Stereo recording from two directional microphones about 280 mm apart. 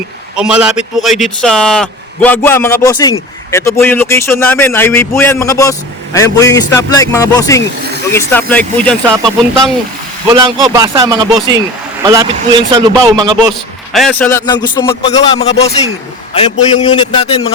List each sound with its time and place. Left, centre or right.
0.3 s a man's voice: centre
10.2 s a man's voice: centre
13.5 s a man's voice: centre; by 17.5 s left